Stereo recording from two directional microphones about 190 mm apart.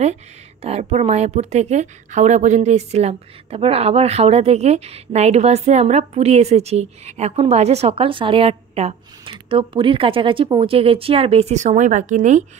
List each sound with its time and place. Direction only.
0.0 s speech: 35° right (ahead or behind)